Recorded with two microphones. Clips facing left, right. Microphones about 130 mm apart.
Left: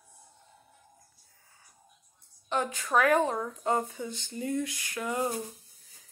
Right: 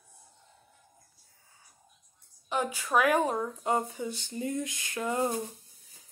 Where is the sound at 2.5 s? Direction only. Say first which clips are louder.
Even; 10° right (ahead or behind).